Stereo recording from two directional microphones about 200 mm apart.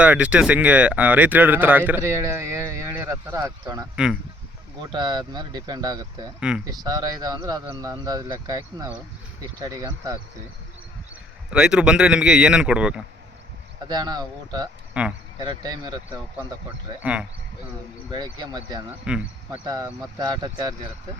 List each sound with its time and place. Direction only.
0.0 s speech: 5° right (ahead or behind)
3.9 s speech: 5° right (ahead or behind)
4.8 s speech: 25° right (ahead or behind)
6.5 s speech: 5° right (ahead or behind)
6.8 s speech: 20° right (ahead or behind)
11.1 s a man's voice: 5° right (ahead or behind)
13.8 s speech: 20° right (ahead or behind)
15.0 s speech: 5° right (ahead or behind)
15.4 s speech: 20° right (ahead or behind)
17.0 s speech: 5° right (ahead or behind)
18.1 s speech: 20° right (ahead or behind)
19.0 s speech: 5° right (ahead or behind)
19.5 s speech: 20° right (ahead or behind)